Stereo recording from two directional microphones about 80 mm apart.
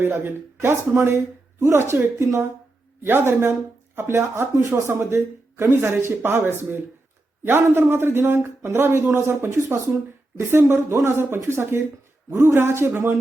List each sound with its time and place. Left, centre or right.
0.0 s speech: right
3.9 s speech: right